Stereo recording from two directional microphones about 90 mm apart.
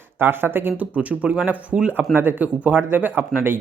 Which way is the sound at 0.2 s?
25° right (ahead or behind).